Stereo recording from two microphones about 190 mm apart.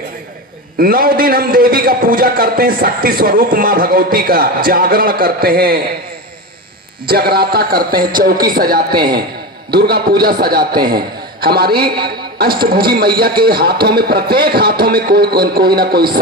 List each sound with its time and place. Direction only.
0.8 s a man's voice: 50° right (ahead or behind)
7.1 s a man's voice: 55° right (ahead or behind)